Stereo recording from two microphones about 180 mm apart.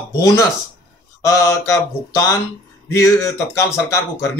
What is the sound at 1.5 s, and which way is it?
Speech, 15° left (ahead or behind).